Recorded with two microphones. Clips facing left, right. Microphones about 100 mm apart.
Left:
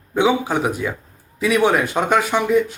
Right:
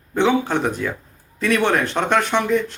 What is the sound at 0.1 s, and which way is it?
Speech, 10° left (ahead or behind).